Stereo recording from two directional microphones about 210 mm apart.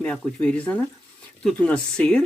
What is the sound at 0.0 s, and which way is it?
Speech, 5° left (ahead or behind).